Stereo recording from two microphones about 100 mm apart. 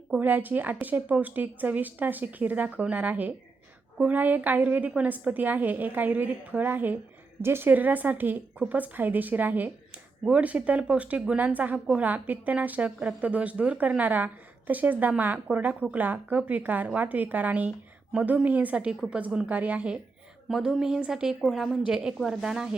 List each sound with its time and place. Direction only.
0.1 s a woman's voice: 20° right (ahead or behind)
20.5 s a woman's voice: 5° right (ahead or behind)